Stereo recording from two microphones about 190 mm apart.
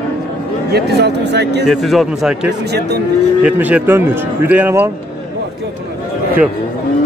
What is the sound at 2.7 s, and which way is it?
Speech, 60° right (ahead or behind).